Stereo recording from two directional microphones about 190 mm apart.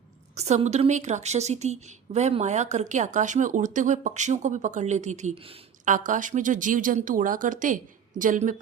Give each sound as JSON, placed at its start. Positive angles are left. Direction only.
{"t": 0.3, "sound": "a woman's voice", "side_deg": -35}